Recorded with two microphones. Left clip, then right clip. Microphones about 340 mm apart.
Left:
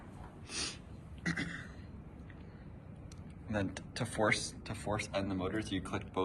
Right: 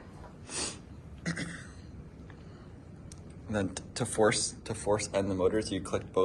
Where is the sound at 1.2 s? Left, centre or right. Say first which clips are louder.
Even; centre.